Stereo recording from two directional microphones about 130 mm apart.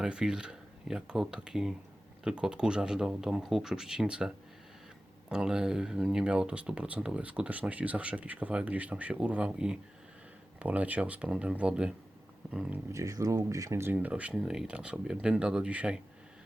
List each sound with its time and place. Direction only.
0.0 s speech: 5° right (ahead or behind)
5.3 s speech: 5° right (ahead or behind)
12.9 s speech: 25° right (ahead or behind); by 16.0 s 10° right (ahead or behind)